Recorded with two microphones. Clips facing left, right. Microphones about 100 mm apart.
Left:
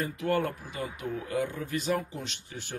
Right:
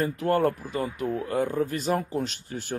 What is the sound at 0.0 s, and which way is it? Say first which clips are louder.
Speech: right 5 dB; 40° right (ahead or behind).